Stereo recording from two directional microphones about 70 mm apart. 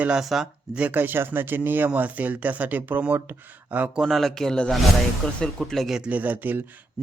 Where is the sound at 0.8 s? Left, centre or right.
Right.